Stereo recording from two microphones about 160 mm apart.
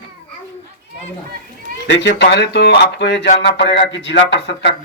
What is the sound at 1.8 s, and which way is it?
Speech, 90° left.